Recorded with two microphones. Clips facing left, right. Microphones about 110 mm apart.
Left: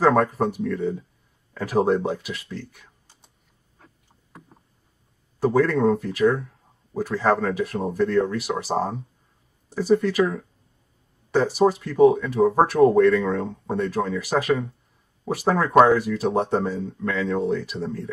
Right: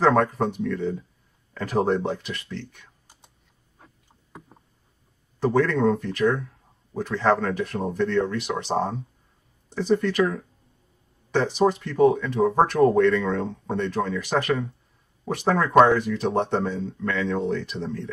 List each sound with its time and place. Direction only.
0.0 s speech: centre (ahead or behind)
3.8 s tick-tock: 15° right (ahead or behind)
5.4 s speech: 5° left (ahead or behind)